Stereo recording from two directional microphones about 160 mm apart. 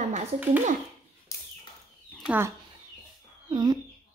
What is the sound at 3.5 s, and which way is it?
Speech, 30° right (ahead or behind).